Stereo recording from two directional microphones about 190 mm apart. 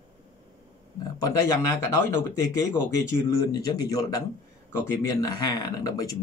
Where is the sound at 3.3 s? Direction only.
20° left (ahead or behind).